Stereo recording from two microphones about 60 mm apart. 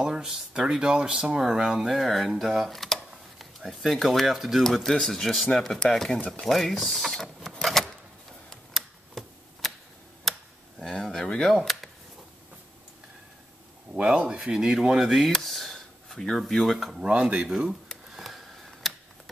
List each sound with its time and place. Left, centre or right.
0.0 s speech: centre
6.4 s a sound: centre
8.5 s tick: centre
10.8 s speech: centre
11.5 s speech: centre
13.9 s speech: centre
17.0 s speech: centre
17.5 s speech: centre
18.1 s a sound: centre